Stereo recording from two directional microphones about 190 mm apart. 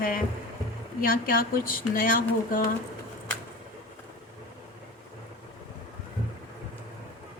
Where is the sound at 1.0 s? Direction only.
50° left (ahead or behind).